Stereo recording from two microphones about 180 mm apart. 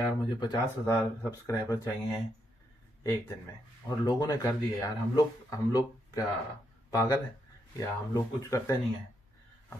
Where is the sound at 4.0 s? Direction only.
20° left (ahead or behind).